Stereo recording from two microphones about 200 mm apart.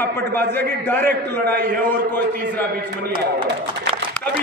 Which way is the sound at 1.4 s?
55° right (ahead or behind).